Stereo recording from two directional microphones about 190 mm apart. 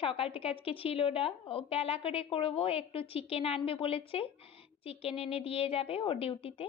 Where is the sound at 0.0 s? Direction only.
30° left (ahead or behind).